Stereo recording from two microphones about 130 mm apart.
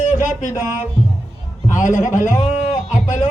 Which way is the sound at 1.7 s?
80° left.